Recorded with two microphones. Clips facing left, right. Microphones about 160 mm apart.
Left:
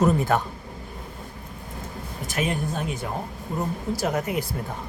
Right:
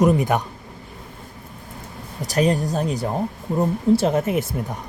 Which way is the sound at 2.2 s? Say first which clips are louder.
Right 7 dB; 35° right (ahead or behind).